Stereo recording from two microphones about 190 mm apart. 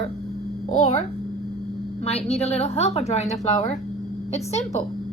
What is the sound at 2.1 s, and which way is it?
A woman's voice, 35° left (ahead or behind).